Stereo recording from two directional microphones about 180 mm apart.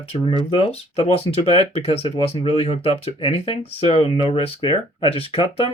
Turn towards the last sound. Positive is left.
turn(degrees=30)  # may be behind; listen again after turning